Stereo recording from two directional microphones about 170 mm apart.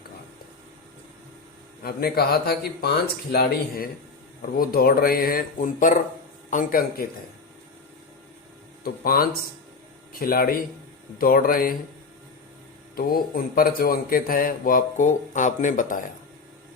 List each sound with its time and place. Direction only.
1.8 s a man's voice: 65° left (ahead or behind)
8.8 s a man's voice: 60° left (ahead or behind)
13.0 s a man's voice: 60° left (ahead or behind)